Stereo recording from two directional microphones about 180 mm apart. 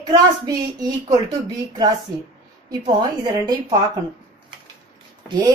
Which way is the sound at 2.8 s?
25° right (ahead or behind).